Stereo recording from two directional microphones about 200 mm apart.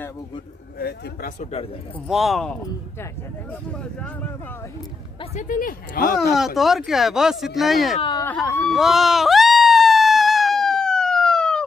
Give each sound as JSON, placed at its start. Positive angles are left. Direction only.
{"t": 0.7, "sound": "speech", "side_deg": 50}
{"t": 1.4, "sound": "speech", "side_deg": 30}
{"t": 2.0, "sound": "speech", "side_deg": 0}
{"t": 5.2, "sound": "speech", "side_deg": 35}
{"t": 6.3, "sound": "speech", "side_deg": 0}
{"t": 8.0, "sound": "speech", "side_deg": 20}
{"t": 8.5, "sound": "a sound", "side_deg": 0}